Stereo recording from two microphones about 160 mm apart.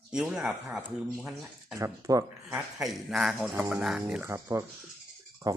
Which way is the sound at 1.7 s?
20° right (ahead or behind).